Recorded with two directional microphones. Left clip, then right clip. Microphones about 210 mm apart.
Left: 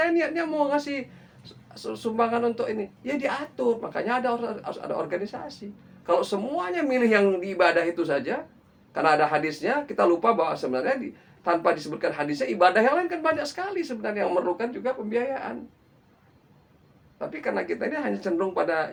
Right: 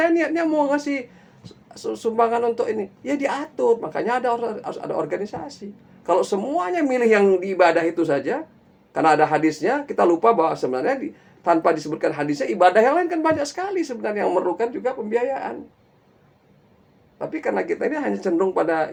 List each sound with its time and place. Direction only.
0.0 s speech: 50° right (ahead or behind)
17.2 s speech: 50° right (ahead or behind)